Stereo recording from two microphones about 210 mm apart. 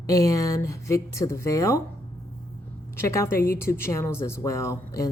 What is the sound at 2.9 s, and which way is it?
A woman's voice, 15° left (ahead or behind).